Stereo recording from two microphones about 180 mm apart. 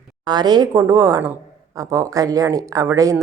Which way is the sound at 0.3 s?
25° right (ahead or behind).